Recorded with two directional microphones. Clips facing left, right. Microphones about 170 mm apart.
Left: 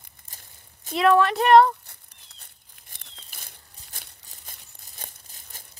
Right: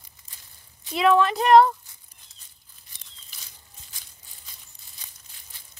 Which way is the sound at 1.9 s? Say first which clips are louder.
Left 4 dB; 65° left (ahead or behind).